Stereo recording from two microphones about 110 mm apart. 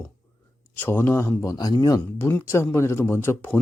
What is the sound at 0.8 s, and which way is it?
Speech, 20° left (ahead or behind).